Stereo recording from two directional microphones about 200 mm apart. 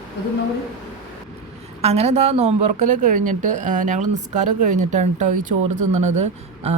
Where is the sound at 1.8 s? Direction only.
30° right (ahead or behind).